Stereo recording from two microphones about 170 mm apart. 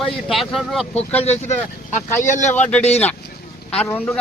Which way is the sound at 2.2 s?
45° left (ahead or behind).